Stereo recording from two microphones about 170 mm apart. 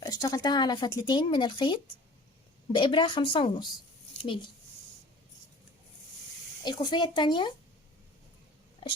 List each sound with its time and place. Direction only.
0.0 s speech: 20° left (ahead or behind)
6.7 s speech: 25° left (ahead or behind)